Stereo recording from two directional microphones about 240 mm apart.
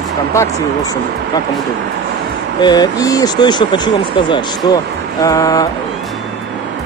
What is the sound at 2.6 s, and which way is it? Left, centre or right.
Speech, centre.